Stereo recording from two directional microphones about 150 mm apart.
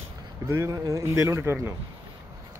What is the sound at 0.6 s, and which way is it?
Speech, 20° right (ahead or behind).